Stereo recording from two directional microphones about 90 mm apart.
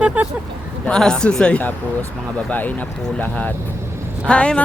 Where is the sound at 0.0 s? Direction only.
15° right (ahead or behind).